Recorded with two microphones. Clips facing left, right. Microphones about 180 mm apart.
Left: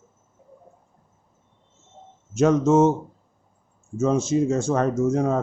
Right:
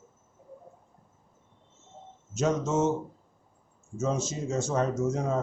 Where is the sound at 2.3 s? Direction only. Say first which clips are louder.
Left 9 dB; 60° left (ahead or behind).